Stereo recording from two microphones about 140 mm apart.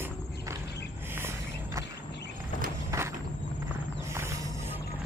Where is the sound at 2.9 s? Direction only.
25° right (ahead or behind).